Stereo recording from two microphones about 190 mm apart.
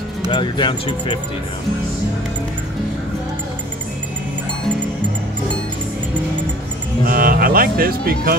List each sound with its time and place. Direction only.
0.3 s speech: 25° left (ahead or behind)
7.1 s speech: 50° right (ahead or behind)